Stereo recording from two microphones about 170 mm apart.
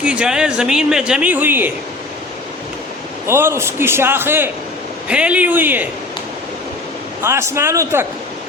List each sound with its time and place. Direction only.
0.0 s a man's voice: 5° right (ahead or behind)
3.2 s a man's voice: 15° right (ahead or behind)
7.2 s a man's voice: 15° right (ahead or behind)